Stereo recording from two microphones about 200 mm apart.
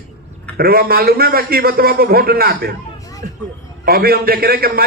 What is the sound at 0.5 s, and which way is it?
A man's voice, 50° right (ahead or behind).